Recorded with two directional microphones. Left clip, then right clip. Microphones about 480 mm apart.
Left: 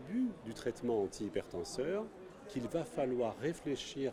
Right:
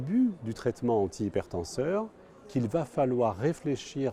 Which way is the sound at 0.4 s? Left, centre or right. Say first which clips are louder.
Right 8 dB; right.